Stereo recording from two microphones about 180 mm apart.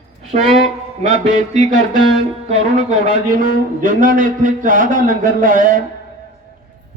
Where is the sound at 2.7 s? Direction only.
45° right (ahead or behind).